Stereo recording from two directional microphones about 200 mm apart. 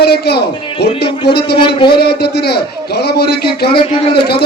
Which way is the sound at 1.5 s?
25° left (ahead or behind).